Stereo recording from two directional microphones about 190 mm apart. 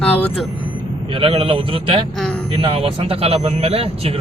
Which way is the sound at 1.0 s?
25° right (ahead or behind).